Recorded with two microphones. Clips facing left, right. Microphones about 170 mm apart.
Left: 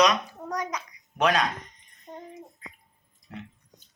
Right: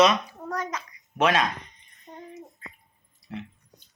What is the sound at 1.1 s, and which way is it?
Speech, centre (ahead or behind).